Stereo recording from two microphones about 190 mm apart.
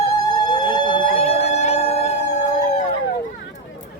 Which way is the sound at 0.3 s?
25° left (ahead or behind).